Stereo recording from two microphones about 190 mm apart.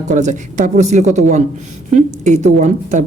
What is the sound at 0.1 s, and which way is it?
Speech, 40° right (ahead or behind).